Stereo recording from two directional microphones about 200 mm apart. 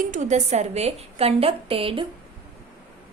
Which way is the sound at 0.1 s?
35° right (ahead or behind).